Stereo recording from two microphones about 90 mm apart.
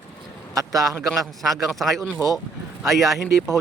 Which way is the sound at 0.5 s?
40° right (ahead or behind).